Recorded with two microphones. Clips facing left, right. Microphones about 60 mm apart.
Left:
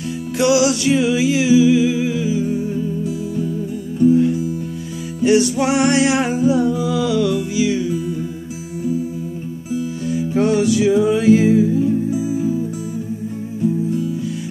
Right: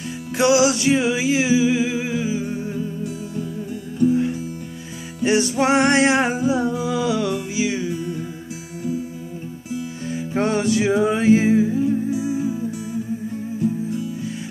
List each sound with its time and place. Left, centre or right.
0.4 s music: right
5.2 s music: right
7.9 s music: centre
10.0 s music: right